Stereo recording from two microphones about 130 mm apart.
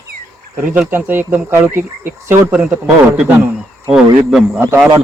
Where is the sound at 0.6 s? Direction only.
10° right (ahead or behind).